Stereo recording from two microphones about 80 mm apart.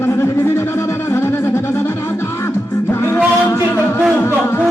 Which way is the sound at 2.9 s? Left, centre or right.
Left.